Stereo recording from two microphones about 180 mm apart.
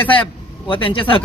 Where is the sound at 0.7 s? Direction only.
30° left (ahead or behind).